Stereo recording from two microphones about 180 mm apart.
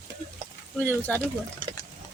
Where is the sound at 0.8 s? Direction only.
10° left (ahead or behind).